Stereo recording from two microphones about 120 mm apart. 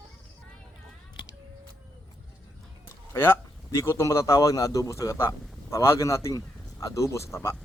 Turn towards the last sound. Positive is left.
turn(degrees=25)  # may be behind; listen again after turning